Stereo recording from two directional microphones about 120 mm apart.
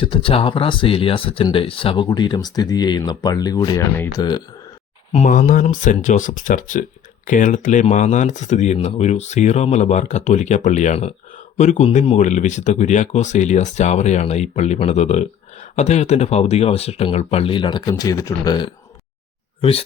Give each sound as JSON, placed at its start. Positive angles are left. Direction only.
{"t": 0.0, "sound": "speech", "side_deg": 45}
{"t": 5.1, "sound": "speech", "side_deg": 70}